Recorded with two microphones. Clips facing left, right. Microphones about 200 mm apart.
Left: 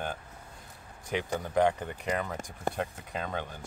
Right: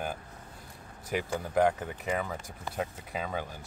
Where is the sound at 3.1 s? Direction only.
5° right (ahead or behind).